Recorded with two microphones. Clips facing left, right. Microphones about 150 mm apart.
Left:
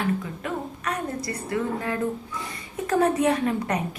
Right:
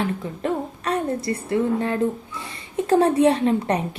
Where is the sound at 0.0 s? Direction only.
30° right (ahead or behind).